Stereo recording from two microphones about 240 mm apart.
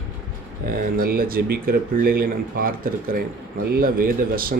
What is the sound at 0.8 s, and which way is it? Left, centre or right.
Speech, right.